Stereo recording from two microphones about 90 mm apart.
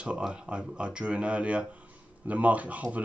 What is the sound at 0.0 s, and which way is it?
Speech, 10° right (ahead or behind).